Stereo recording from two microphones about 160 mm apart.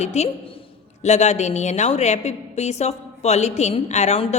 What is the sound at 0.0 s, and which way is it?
A woman's voice, 45° left (ahead or behind).